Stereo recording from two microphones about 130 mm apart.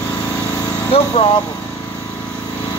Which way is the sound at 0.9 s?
50° left (ahead or behind).